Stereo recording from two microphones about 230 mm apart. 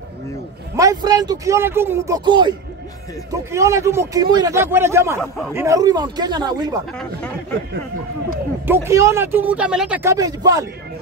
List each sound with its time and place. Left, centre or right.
0.7 s speech: centre
8.6 s speech: centre